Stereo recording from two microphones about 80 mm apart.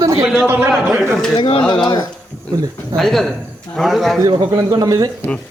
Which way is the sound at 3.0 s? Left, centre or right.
Centre.